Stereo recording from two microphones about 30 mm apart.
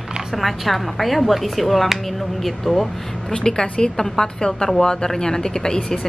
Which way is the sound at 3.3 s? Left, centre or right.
Left.